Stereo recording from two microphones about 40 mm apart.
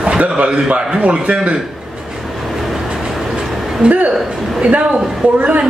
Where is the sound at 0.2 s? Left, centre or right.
Right.